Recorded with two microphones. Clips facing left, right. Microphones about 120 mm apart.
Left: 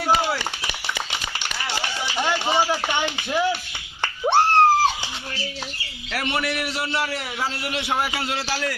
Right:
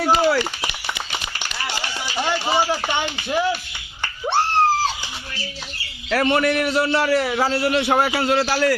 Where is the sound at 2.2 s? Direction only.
15° right (ahead or behind).